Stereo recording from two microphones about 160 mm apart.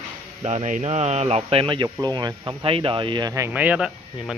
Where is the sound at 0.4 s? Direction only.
45° right (ahead or behind).